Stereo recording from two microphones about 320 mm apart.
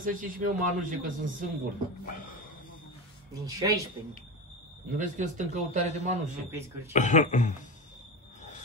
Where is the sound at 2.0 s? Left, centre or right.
Left.